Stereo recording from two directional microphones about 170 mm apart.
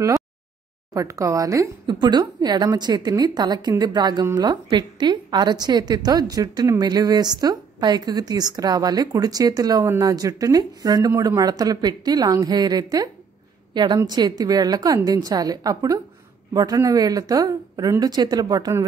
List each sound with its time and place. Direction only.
0.9 s a woman's voice: 20° right (ahead or behind)